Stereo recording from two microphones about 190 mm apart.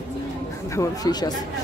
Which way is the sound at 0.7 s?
20° left (ahead or behind).